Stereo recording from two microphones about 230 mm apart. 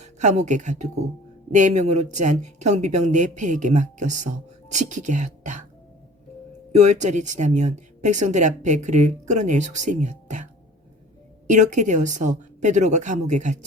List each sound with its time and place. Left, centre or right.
0.0 s speech: right
6.7 s speech: right